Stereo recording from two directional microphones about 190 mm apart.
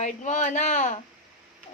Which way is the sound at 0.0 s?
40° left (ahead or behind).